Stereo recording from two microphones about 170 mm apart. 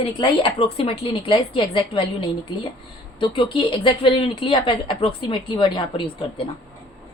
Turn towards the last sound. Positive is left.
turn(degrees=30)  # may be behind; listen again after turning